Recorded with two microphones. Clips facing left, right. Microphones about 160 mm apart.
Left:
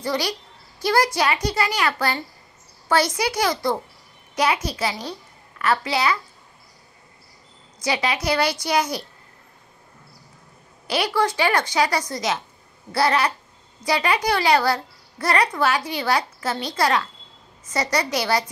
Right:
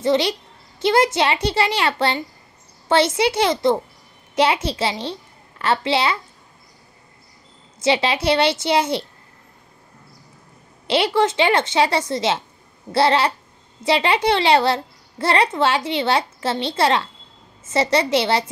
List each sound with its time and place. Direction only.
0.0 s a child's voice: 25° right (ahead or behind)
7.8 s a child's voice: 25° right (ahead or behind)
10.9 s a child's voice: 25° right (ahead or behind)